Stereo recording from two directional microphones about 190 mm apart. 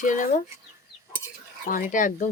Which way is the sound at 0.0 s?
45° left (ahead or behind).